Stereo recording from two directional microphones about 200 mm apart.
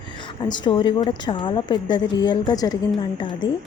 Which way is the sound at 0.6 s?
25° left (ahead or behind).